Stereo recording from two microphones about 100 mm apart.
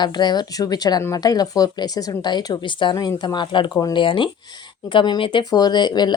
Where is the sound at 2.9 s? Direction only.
40° left (ahead or behind).